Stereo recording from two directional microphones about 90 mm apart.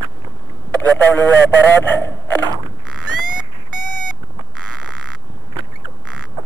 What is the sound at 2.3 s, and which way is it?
Frog, 45° right (ahead or behind).